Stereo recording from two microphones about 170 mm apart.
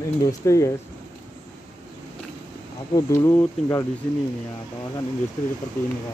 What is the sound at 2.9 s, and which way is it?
Speech, 15° left (ahead or behind).